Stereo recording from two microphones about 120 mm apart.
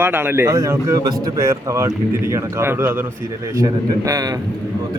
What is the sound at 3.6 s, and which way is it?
Speech, 30° right (ahead or behind).